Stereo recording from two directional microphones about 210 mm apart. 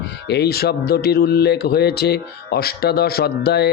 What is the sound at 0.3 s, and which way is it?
Speech, 50° left (ahead or behind).